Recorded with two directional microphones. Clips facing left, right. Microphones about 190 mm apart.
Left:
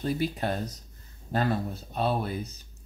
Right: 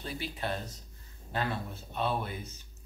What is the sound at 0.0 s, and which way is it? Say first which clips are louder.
Speech: left 8 dB; 45° left (ahead or behind).